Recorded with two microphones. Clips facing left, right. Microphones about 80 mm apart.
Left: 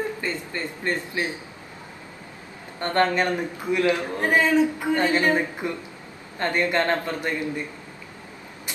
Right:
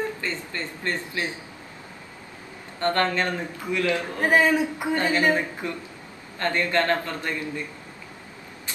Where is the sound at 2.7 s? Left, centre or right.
Left.